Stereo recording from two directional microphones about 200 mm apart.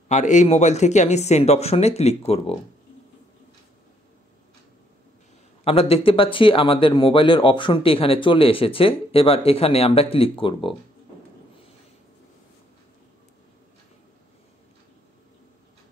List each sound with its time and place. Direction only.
0.1 s speech: 35° left (ahead or behind)
5.6 s a man's voice: 30° left (ahead or behind)